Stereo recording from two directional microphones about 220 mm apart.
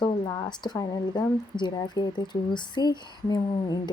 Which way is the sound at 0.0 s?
15° left (ahead or behind).